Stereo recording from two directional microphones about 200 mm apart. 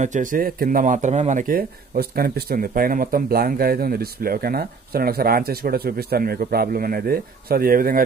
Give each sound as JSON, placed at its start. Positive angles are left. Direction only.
{"t": 0.0, "sound": "a man's voice", "side_deg": -40}